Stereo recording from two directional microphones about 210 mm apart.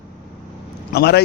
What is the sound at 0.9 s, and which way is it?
Speech, 50° left (ahead or behind).